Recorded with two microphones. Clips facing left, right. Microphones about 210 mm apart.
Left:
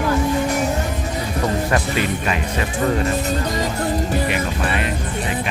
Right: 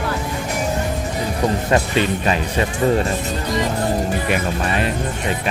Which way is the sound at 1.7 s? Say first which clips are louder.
Right 3 dB; 30° right (ahead or behind).